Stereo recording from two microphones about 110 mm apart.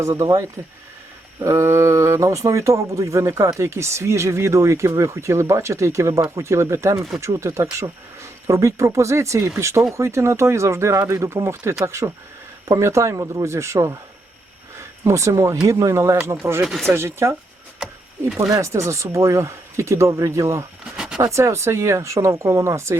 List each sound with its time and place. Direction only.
0.0 s speech: 30° right (ahead or behind)
16.6 s speech: centre (ahead or behind)
16.9 s speech: 20° right (ahead or behind)
18.3 s speech: 30° right (ahead or behind)
20.9 s a sound: 5° right (ahead or behind)
21.2 s speech: 25° right (ahead or behind)